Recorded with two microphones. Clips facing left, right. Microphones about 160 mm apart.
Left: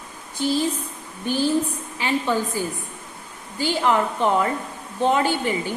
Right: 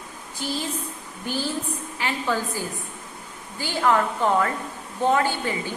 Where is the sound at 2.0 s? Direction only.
20° left (ahead or behind).